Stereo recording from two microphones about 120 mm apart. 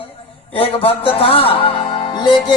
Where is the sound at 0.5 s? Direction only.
50° left (ahead or behind).